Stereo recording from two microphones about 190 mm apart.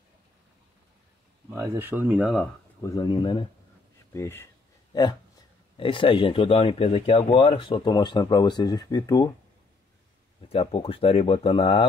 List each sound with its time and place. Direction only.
1.5 s speech: 15° right (ahead or behind)
2.8 s speech: 20° left (ahead or behind)
4.1 s speech: 15° left (ahead or behind)
10.5 s speech: 30° left (ahead or behind)